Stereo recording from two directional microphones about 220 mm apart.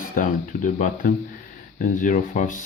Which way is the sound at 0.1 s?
35° left (ahead or behind).